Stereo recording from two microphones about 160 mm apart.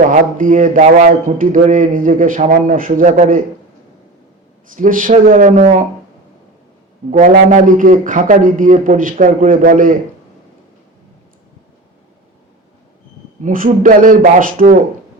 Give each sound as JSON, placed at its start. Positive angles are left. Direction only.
{"t": 0.1, "sound": "speech", "side_deg": -55}
{"t": 4.7, "sound": "speech", "side_deg": -55}
{"t": 7.1, "sound": "speech", "side_deg": -55}
{"t": 13.4, "sound": "speech", "side_deg": -55}